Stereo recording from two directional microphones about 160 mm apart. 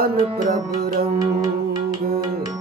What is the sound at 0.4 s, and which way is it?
Music, 50° right (ahead or behind).